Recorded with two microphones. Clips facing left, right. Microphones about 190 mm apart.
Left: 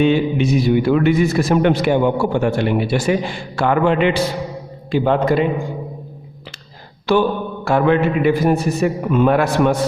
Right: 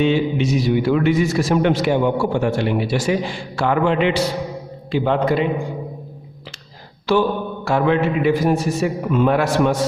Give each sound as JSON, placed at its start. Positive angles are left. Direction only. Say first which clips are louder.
{"t": 0.0, "sound": "a man's voice", "louder": "left 2 dB", "side_deg": 55}
{"t": 7.1, "sound": "a man's voice", "louder": "left 1 dB", "side_deg": 55}